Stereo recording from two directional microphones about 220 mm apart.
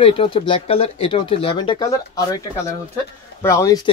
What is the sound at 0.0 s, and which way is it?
Speech, 25° left (ahead or behind).